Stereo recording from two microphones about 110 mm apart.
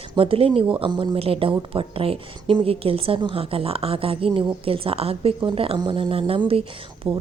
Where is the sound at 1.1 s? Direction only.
60° right (ahead or behind).